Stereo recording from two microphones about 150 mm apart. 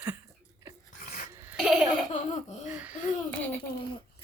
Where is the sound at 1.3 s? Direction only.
15° right (ahead or behind).